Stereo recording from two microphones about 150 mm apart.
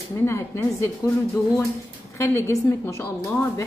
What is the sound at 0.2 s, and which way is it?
A woman's voice, 20° left (ahead or behind).